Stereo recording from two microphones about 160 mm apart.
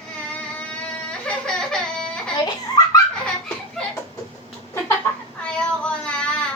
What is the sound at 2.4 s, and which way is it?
Baby laughter, 25° left (ahead or behind).